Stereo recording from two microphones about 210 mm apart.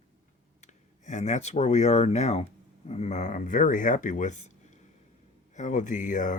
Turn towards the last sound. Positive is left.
turn(degrees=40)  # may be behind; listen again after turning